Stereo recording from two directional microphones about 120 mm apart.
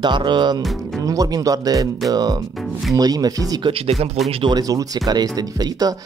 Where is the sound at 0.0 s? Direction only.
40° right (ahead or behind).